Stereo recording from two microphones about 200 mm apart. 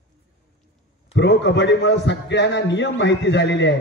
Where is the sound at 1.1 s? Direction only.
60° left (ahead or behind).